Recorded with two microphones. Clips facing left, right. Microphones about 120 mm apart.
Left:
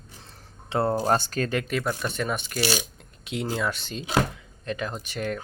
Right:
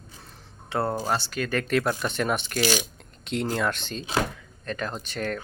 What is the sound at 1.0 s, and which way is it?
Speech, 45° left (ahead or behind).